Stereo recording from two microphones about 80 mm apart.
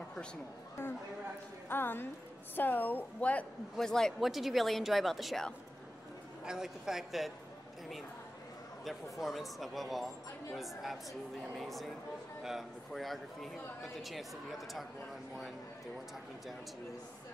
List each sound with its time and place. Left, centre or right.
0.8 s a woman's voice: left
3.7 s speech: centre
8.8 s speech: centre